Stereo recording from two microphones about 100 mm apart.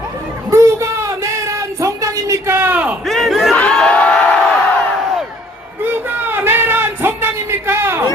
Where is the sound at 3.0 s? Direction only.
Centre (ahead or behind).